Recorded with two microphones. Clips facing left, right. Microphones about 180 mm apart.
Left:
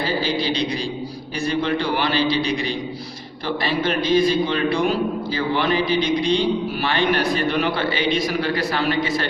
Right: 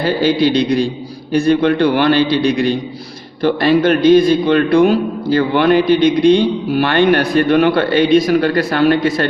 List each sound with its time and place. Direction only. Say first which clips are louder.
0.2 s a man's voice: right 9 dB; 60° right (ahead or behind)